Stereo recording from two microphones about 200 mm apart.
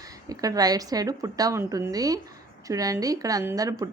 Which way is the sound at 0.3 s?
20° right (ahead or behind).